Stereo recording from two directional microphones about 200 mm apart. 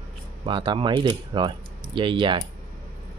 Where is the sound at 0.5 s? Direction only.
25° right (ahead or behind).